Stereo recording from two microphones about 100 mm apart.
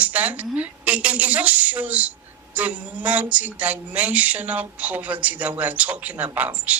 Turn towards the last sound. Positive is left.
turn(degrees=-15)  # may be behind; listen again after turning